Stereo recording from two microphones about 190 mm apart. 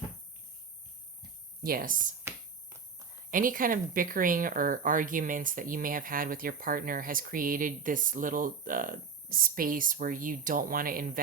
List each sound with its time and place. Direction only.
1.6 s speech: 50° right (ahead or behind)
3.2 s speech: 45° right (ahead or behind)